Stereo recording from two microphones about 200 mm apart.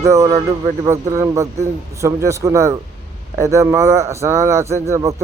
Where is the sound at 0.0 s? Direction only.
15° right (ahead or behind).